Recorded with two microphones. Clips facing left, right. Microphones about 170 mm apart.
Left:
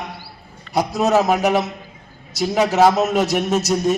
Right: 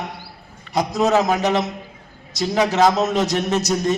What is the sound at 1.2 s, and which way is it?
A man's voice, centre (ahead or behind).